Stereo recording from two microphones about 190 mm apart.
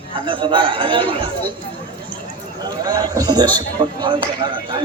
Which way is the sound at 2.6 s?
20° right (ahead or behind).